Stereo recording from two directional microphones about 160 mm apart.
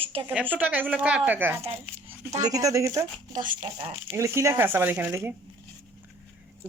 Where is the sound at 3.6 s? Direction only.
35° right (ahead or behind).